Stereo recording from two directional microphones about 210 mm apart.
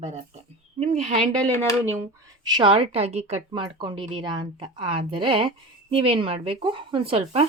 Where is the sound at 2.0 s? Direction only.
20° right (ahead or behind).